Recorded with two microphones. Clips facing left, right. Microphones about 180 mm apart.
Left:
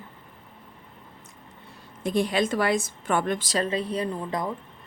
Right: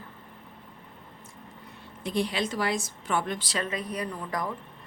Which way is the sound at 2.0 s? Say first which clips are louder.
Left 5 dB; 50° left (ahead or behind).